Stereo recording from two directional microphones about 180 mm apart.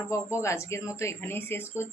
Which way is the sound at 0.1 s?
15° left (ahead or behind).